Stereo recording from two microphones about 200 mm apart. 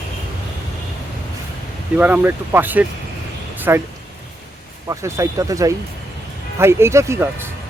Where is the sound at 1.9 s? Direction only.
5° right (ahead or behind).